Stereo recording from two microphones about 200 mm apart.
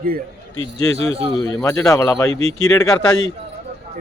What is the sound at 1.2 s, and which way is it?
Speech, 30° right (ahead or behind).